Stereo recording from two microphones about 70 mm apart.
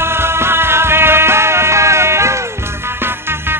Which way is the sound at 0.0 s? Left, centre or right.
Right.